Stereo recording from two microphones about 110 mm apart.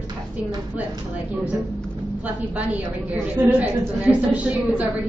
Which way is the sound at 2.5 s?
15° right (ahead or behind).